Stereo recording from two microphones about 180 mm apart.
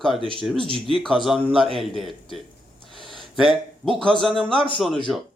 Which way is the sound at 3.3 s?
Centre (ahead or behind).